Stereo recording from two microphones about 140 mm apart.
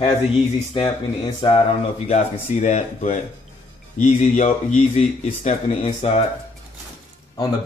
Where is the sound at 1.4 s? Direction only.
35° left (ahead or behind).